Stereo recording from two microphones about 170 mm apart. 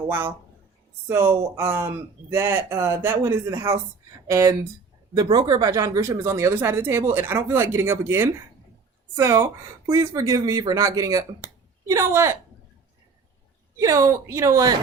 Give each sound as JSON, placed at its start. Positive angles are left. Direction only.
{"t": 1.0, "sound": "speech", "side_deg": -15}
{"t": 13.7, "sound": "speech", "side_deg": -20}